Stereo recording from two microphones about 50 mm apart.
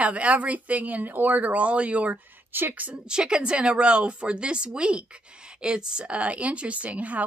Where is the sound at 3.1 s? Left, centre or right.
Centre.